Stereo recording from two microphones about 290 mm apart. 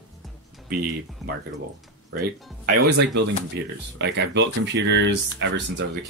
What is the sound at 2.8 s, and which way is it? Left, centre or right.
Speech, right.